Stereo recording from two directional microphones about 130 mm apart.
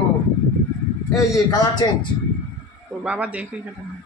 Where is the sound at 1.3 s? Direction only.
30° left (ahead or behind).